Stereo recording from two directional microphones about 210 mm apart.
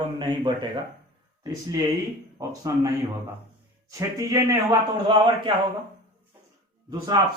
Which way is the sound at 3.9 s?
15° right (ahead or behind).